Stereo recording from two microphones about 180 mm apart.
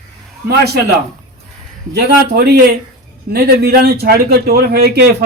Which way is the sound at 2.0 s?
65° right (ahead or behind).